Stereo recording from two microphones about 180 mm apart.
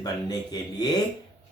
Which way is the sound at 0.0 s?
20° left (ahead or behind).